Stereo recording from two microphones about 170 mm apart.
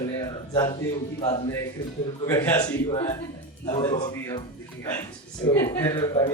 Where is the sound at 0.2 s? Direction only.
20° left (ahead or behind).